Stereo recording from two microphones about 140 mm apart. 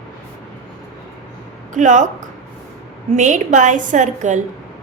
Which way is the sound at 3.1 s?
60° right (ahead or behind).